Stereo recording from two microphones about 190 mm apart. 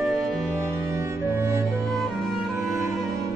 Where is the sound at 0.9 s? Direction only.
15° right (ahead or behind).